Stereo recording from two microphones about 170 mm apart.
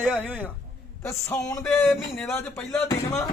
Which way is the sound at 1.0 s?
15° left (ahead or behind).